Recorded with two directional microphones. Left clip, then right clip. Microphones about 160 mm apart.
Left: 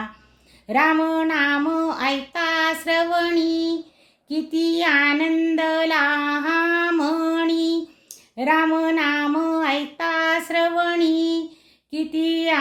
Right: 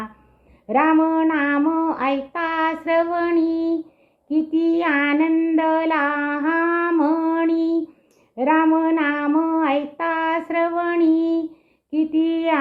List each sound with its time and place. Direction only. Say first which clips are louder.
0.7 s female singing: right 1 dB; 20° left (ahead or behind)
4.3 s child singing: right 3 dB; 20° left (ahead or behind)
11.9 s female singing: right 3 dB; 20° left (ahead or behind)